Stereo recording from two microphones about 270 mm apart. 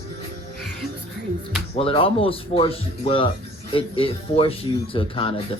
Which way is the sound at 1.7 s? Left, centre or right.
Centre.